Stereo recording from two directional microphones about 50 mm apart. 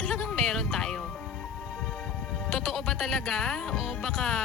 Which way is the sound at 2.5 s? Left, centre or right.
Centre.